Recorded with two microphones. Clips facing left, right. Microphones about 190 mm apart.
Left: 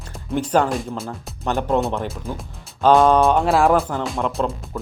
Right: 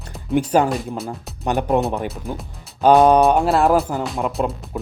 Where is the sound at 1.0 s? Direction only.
15° right (ahead or behind).